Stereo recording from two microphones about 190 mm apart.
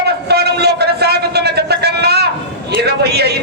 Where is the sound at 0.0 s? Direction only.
60° right (ahead or behind).